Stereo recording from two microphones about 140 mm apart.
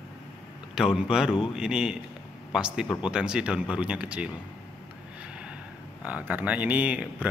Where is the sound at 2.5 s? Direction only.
5° right (ahead or behind).